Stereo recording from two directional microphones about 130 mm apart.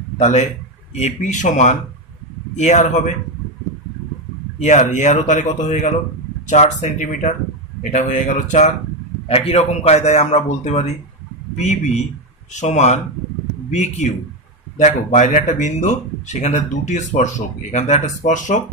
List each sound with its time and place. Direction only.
0.2 s speech: 65° left (ahead or behind)
4.6 s speech: 65° left (ahead or behind)
9.3 s speech: 50° left (ahead or behind); by 18.6 s 75° left (ahead or behind)